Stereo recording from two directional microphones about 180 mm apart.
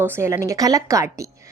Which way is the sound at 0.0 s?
15° right (ahead or behind).